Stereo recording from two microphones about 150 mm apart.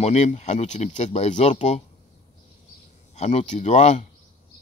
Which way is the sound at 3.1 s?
50° left (ahead or behind).